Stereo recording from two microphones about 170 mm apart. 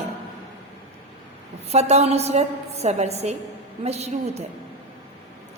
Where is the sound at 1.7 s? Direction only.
40° right (ahead or behind).